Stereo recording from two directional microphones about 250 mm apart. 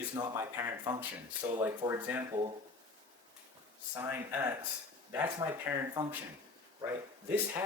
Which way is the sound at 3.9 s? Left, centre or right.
Centre.